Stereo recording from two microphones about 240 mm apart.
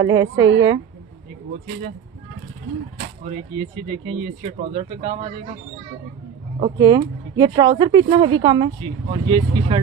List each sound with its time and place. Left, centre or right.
0.0 s speech: centre
3.3 s speech: right
6.6 s speech: centre